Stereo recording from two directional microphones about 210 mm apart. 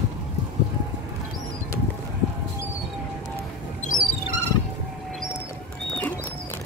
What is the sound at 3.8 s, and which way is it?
Music, 35° left (ahead or behind).